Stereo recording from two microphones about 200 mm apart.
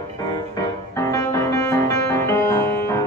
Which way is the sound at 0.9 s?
15° left (ahead or behind).